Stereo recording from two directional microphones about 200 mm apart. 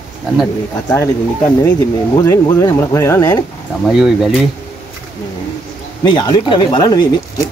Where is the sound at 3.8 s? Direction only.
5° right (ahead or behind).